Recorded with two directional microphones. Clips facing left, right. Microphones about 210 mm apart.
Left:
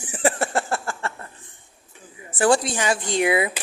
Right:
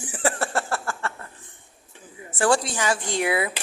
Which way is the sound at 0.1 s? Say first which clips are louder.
Left 3 dB; 20° left (ahead or behind).